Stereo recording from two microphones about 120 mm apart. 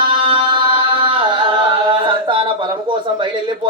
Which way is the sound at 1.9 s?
45° right (ahead or behind).